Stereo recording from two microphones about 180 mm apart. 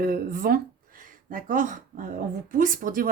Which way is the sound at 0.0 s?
50° right (ahead or behind).